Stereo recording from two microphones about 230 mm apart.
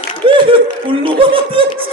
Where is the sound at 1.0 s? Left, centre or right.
Right.